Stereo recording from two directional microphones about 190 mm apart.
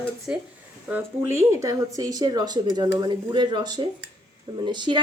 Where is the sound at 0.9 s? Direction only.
10° right (ahead or behind).